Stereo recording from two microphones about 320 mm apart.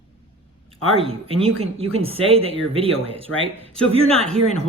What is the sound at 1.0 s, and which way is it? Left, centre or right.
Speech, centre.